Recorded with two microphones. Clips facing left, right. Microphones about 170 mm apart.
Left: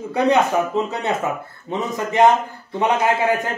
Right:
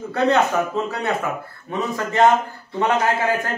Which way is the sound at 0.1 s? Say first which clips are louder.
Left 1 dB; 15° left (ahead or behind).